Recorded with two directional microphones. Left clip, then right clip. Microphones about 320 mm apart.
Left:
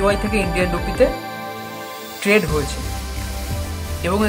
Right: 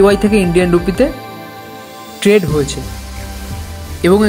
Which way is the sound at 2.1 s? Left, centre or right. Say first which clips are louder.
Right 5 dB; centre.